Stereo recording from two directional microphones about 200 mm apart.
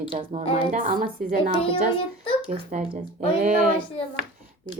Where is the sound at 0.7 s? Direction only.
40° right (ahead or behind).